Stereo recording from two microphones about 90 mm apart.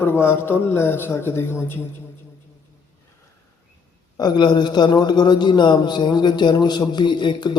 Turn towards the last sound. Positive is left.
turn(degrees=55)  # may be behind; listen again after turning